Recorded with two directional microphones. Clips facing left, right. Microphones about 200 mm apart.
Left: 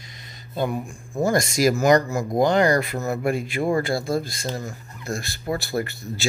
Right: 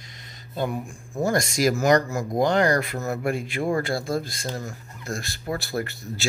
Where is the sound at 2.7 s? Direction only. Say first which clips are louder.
Left 2 dB; 20° left (ahead or behind).